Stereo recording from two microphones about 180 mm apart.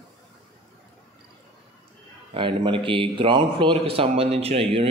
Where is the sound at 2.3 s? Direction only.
30° right (ahead or behind).